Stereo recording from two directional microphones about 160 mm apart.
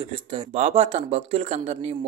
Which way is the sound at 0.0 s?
30° right (ahead or behind).